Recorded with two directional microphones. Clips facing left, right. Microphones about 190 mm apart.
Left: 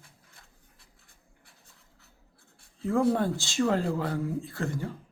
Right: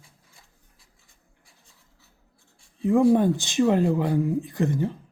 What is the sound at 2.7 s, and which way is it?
Speech, 20° right (ahead or behind).